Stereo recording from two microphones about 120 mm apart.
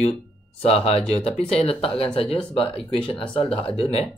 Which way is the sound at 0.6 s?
55° left (ahead or behind).